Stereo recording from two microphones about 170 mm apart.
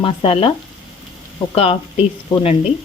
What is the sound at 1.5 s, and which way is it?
Sizzle, 35° left (ahead or behind).